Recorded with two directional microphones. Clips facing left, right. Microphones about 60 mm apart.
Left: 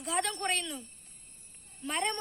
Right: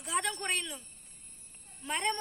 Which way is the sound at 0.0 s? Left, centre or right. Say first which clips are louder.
Left 2 dB; centre.